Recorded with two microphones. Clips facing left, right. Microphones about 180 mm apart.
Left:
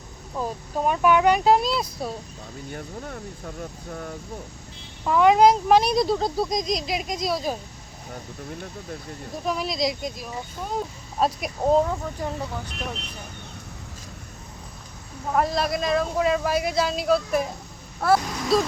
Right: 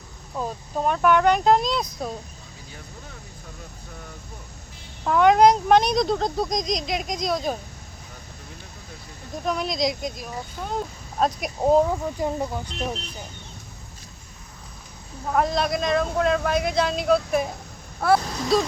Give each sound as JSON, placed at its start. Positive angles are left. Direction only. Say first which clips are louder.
{"t": 0.3, "sound": "speech", "louder": "even", "side_deg": 5}
{"t": 2.6, "sound": "speech", "louder": "left 9 dB", "side_deg": 55}
{"t": 5.0, "sound": "speech", "louder": "even", "side_deg": 0}
{"t": 9.5, "sound": "speech", "louder": "right 1 dB", "side_deg": 5}
{"t": 15.3, "sound": "speech", "louder": "right 1 dB", "side_deg": 0}
{"t": 18.0, "sound": "a sound", "louder": "right 1 dB", "side_deg": 0}